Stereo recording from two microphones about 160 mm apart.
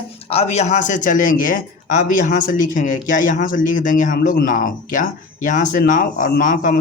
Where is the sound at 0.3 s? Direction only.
40° left (ahead or behind).